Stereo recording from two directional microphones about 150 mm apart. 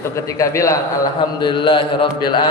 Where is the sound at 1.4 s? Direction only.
35° left (ahead or behind).